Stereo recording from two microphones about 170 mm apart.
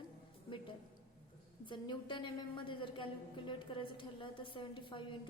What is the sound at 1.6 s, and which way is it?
A woman's voice, 30° left (ahead or behind).